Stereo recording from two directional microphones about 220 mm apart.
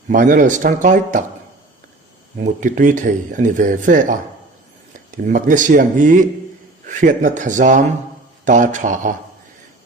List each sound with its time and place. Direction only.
0.1 s speech: 40° right (ahead or behind)
2.4 s speech: 35° right (ahead or behind)